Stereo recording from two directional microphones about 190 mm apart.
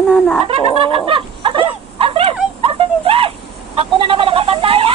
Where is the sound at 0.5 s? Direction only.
30° right (ahead or behind).